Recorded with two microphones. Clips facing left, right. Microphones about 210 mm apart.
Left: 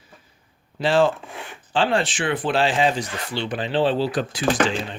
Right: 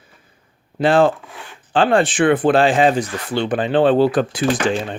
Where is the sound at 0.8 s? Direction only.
55° right (ahead or behind).